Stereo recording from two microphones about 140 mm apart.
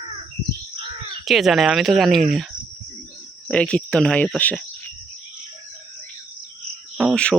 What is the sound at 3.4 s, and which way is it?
Speech, 5° left (ahead or behind).